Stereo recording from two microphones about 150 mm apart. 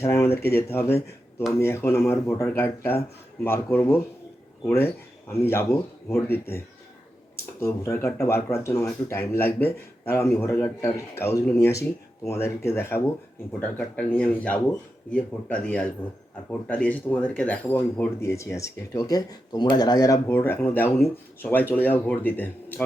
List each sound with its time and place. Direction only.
0.0 s a sound: 15° left (ahead or behind)
0.5 s speech: 15° left (ahead or behind)
7.6 s speech: 20° left (ahead or behind)